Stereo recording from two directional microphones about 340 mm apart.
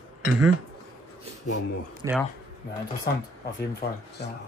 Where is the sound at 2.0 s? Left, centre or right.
Centre.